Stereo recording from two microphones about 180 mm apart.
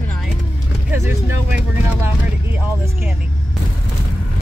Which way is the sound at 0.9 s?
15° right (ahead or behind).